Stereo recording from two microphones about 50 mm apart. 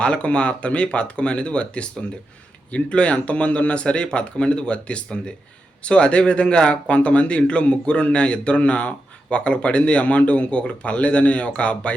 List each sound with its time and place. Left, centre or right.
0.0 s speech: left